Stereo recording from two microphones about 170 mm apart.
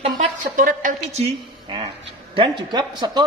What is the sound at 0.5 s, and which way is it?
A woman's voice, 50° right (ahead or behind).